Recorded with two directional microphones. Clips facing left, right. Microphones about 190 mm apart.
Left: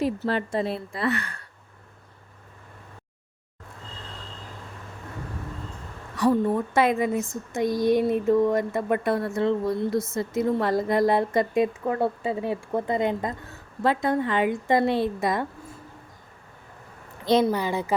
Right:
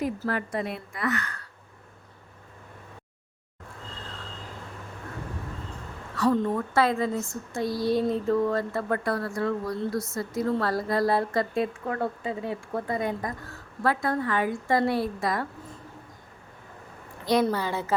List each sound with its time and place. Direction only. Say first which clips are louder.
0.3 s speech: left 4 dB; 30° left (ahead or behind)
6.1 s speech: left 2 dB; 15° left (ahead or behind)
17.4 s speech: left 2 dB; 15° left (ahead or behind)